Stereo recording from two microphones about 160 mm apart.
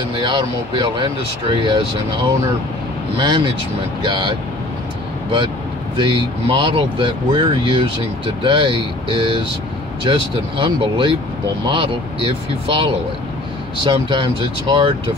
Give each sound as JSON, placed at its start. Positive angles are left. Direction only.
{"t": 0.1, "sound": "speech", "side_deg": -30}
{"t": 3.2, "sound": "speech", "side_deg": -30}
{"t": 5.9, "sound": "speech", "side_deg": -30}